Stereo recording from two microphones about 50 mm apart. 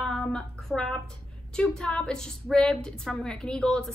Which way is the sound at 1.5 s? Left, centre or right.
Centre.